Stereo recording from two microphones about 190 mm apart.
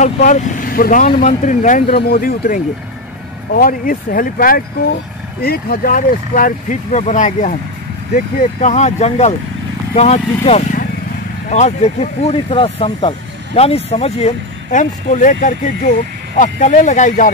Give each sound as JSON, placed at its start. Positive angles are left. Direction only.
{"t": 0.0, "sound": "speech", "side_deg": 40}